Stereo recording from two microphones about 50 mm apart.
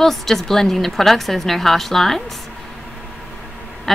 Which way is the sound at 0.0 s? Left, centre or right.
Centre.